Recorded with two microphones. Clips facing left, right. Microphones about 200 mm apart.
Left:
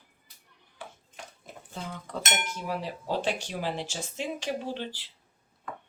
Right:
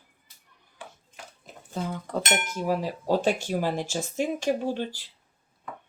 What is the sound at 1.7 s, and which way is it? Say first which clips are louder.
Speech: right 7 dB; 45° right (ahead or behind).